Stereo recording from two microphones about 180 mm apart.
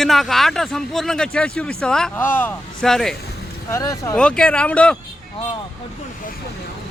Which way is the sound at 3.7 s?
20° left (ahead or behind).